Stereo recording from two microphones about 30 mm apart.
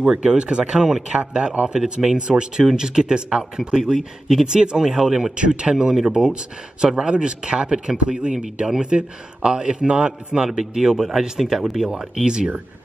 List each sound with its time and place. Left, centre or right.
0.0 s speech: right
1.7 s speech: right
2.1 s speech: right
5.3 s speech: right
10.4 s speech: right
12.2 s speech: right